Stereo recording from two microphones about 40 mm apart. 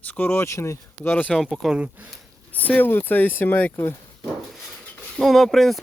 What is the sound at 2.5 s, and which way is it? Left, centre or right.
Speech, left.